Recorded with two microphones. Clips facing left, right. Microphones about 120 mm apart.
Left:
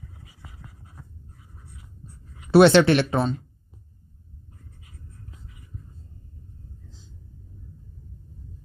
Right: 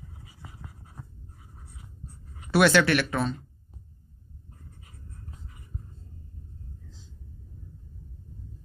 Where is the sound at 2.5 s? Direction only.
25° left (ahead or behind).